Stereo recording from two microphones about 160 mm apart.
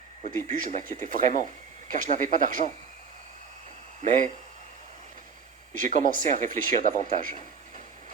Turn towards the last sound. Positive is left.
turn(degrees=-55)  # may be behind; listen again after turning